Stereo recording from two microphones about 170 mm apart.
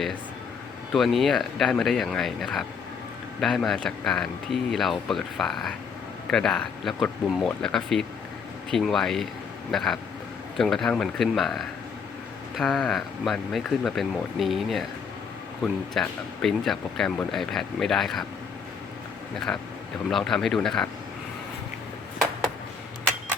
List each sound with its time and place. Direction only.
0.9 s speech: centre (ahead or behind)
19.5 s speech: 10° left (ahead or behind)